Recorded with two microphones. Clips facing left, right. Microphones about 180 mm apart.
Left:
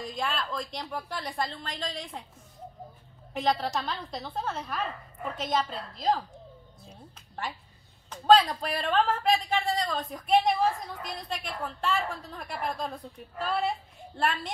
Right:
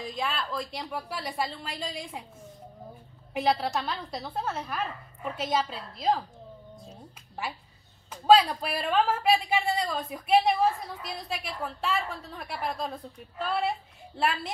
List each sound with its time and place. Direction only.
0.0 s a woman's voice: centre (ahead or behind)
3.3 s a woman's voice: 10° right (ahead or behind)